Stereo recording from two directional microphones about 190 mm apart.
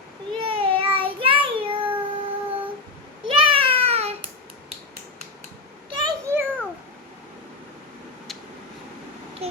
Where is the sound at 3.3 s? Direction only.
25° right (ahead or behind).